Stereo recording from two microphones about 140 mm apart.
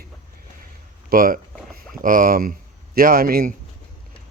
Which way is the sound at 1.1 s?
90° right.